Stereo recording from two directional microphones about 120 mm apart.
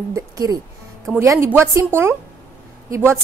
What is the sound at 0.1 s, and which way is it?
A woman's voice, 30° right (ahead or behind).